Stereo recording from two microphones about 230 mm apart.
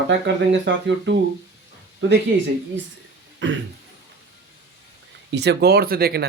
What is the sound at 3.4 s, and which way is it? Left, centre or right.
Speech, right.